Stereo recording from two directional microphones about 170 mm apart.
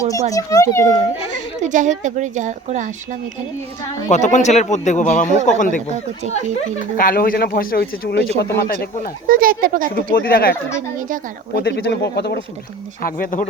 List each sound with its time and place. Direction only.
0.1 s a child's voice: 20° left (ahead or behind)
1.3 s speech: 45° right (ahead or behind)
4.1 s a man's voice: 45° left (ahead or behind); by 8.9 s 70° left (ahead or behind)
9.2 s speech: 55° right (ahead or behind)
9.9 s speech: 65° left (ahead or behind)
11.5 s speech: 70° left (ahead or behind)
13.0 s speech: 55° left (ahead or behind)